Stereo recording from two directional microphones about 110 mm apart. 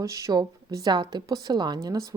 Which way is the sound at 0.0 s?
30° right (ahead or behind).